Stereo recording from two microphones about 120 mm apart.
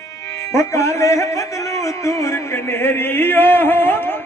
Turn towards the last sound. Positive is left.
turn(degrees=15)  # may be behind; listen again after turning